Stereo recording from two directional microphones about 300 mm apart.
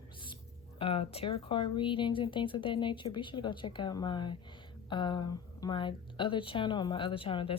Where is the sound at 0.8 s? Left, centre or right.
Centre.